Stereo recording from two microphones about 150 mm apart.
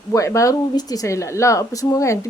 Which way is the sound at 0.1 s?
20° left (ahead or behind).